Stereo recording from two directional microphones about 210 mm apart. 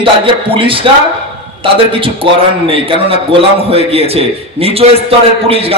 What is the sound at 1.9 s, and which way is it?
A man's voice, 25° right (ahead or behind).